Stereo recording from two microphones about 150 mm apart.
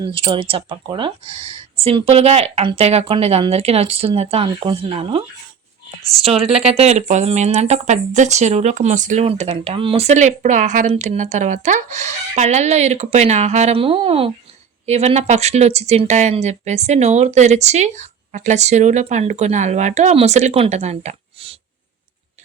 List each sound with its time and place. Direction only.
0.0 s speech: 30° right (ahead or behind); by 9.2 s 55° right (ahead or behind)
9.2 s speech: 40° right (ahead or behind)